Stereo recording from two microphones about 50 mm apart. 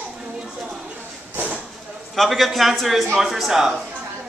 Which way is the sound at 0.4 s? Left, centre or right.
Centre.